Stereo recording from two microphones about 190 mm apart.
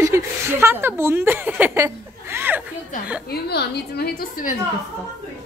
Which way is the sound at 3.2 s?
55° left (ahead or behind).